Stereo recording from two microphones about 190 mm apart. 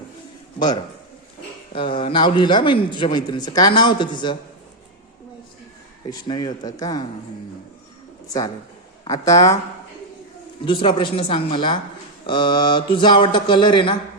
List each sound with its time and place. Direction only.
1.7 s a man's voice: 25° left (ahead or behind)
6.1 s a man's voice: 25° left (ahead or behind)
8.3 s a man's voice: 20° left (ahead or behind)
10.7 s a man's voice: 25° left (ahead or behind)